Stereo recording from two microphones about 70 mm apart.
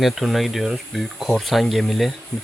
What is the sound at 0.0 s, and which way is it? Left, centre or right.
Speech, centre.